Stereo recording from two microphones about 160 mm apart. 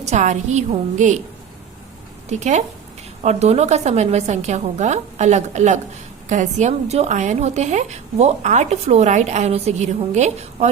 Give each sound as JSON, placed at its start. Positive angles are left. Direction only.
{"t": 0.0, "sound": "a woman's voice", "side_deg": -45}
{"t": 2.3, "sound": "a woman's voice", "side_deg": -45}